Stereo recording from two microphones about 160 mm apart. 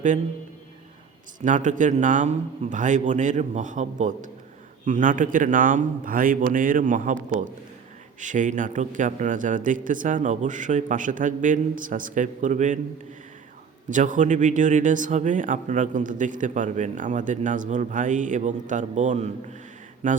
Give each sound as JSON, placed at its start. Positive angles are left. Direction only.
{"t": 1.4, "sound": "a man's voice", "side_deg": -50}
{"t": 8.2, "sound": "a man's voice", "side_deg": -50}
{"t": 13.9, "sound": "a man's voice", "side_deg": -55}